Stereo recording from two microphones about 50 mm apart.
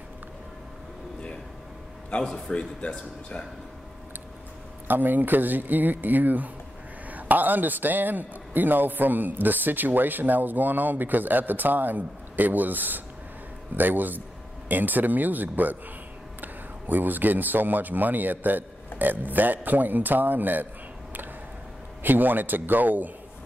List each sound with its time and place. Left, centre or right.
2.0 s a man's voice: left
4.8 s a man's voice: right
22.0 s a man's voice: right